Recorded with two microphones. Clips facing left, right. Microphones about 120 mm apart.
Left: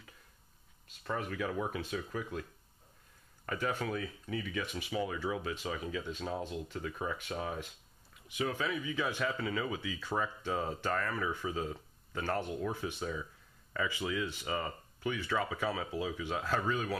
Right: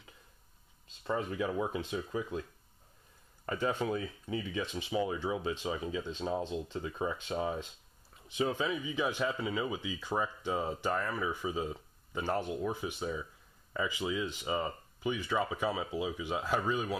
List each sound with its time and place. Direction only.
1.0 s speech: 20° right (ahead or behind)
3.4 s speech: 25° right (ahead or behind)